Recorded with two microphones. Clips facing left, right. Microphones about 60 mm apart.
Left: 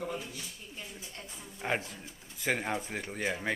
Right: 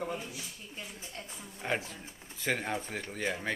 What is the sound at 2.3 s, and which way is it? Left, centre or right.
Speech, centre.